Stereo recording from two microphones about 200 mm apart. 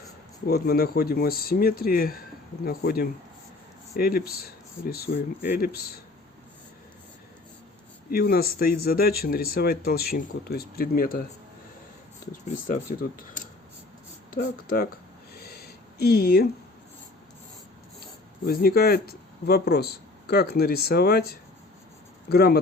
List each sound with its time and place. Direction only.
0.4 s speech: 50° left (ahead or behind)
8.1 s speech: 50° left (ahead or behind)
12.6 s speech: 45° left (ahead or behind)
15.4 s a sound: 50° left (ahead or behind)
18.4 s speech: 50° left (ahead or behind)